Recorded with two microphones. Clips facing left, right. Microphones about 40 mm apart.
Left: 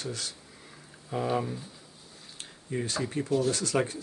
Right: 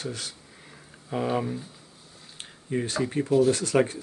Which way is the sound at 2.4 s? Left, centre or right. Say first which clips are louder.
Right 4 dB; right.